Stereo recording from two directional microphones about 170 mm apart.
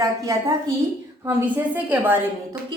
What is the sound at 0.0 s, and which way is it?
A woman's voice, 20° right (ahead or behind).